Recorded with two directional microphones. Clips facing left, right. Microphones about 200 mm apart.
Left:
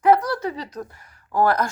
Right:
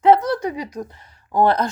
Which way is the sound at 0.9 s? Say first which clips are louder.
Right 2 dB; 25° right (ahead or behind).